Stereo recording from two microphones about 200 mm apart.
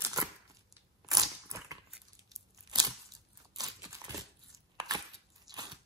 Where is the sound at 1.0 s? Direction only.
20° right (ahead or behind).